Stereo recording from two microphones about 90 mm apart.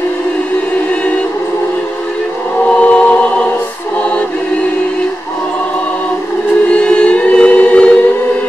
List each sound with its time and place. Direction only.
2.8 s choir: 15° left (ahead or behind)
6.7 s choir: 10° left (ahead or behind)